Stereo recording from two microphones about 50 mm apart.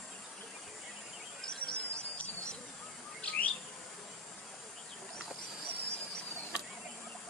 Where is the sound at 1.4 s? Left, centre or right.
Centre.